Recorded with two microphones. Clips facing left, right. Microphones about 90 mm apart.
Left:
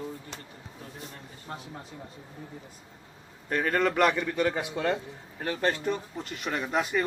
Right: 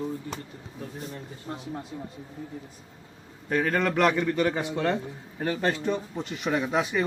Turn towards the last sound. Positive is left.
turn(degrees=-5)  # may be behind; listen again after turning